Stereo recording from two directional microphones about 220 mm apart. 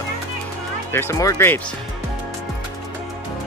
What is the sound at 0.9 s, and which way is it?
Speech, 15° left (ahead or behind).